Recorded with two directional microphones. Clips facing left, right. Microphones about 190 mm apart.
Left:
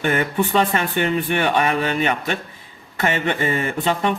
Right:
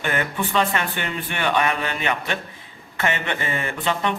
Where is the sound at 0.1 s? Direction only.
45° left (ahead or behind).